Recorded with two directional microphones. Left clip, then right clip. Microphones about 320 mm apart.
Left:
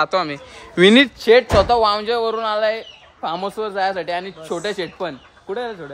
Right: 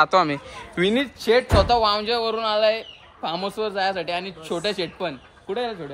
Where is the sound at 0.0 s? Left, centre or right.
Centre.